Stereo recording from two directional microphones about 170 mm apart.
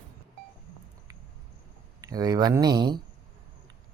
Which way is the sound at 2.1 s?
20° right (ahead or behind).